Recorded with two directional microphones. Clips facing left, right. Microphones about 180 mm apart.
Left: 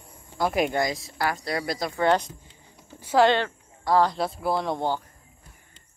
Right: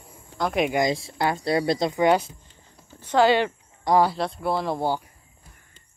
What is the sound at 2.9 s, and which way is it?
Speech, 10° left (ahead or behind).